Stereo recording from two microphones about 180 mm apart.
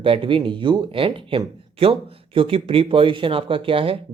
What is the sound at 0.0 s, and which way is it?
Speech, 30° right (ahead or behind).